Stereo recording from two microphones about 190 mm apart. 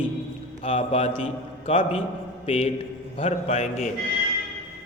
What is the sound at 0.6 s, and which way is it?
A man's voice, 30° left (ahead or behind).